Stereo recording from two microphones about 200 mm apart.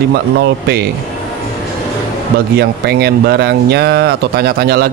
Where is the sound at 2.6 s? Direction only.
55° right (ahead or behind).